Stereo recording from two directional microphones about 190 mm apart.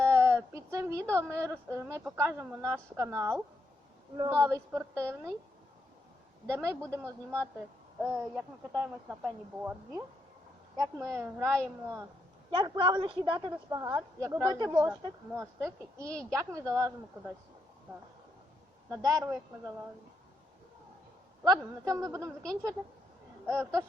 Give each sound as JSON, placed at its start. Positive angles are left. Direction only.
{"t": 0.0, "sound": "a sound", "side_deg": -15}
{"t": 1.1, "sound": "a woman's voice", "side_deg": -15}
{"t": 6.5, "sound": "a woman's voice", "side_deg": -15}
{"t": 12.5, "sound": "a woman's voice", "side_deg": -25}
{"t": 18.9, "sound": "a woman's voice", "side_deg": -20}
{"t": 21.8, "sound": "a woman's voice", "side_deg": -15}